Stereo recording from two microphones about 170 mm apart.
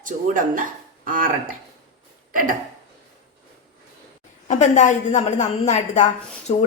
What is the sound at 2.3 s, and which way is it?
Speech, 55° right (ahead or behind).